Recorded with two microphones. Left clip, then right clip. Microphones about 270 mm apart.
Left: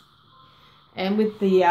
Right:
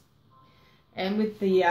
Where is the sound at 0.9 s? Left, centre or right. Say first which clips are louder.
Left 5 dB; left.